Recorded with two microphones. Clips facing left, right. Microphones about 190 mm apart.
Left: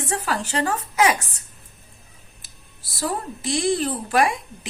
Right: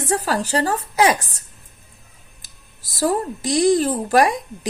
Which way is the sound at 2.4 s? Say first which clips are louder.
Even; 40° right (ahead or behind).